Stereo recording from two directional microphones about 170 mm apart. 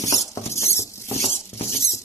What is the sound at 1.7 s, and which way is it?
Patter, 15° left (ahead or behind).